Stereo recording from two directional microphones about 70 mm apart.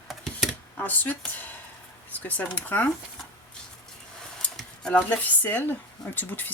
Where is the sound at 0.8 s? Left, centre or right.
Left.